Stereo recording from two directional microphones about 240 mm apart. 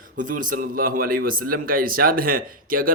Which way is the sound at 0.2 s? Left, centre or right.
Right.